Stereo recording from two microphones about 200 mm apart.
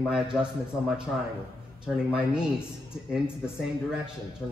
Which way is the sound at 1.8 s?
5° right (ahead or behind).